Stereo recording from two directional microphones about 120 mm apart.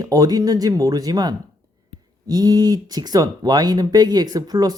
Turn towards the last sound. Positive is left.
turn(degrees=-35)  # may be behind; listen again after turning